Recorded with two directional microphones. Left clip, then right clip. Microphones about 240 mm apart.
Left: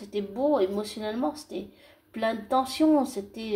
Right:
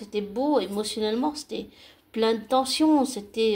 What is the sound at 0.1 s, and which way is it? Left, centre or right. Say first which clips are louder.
A woman's voice: right 1 dB; right.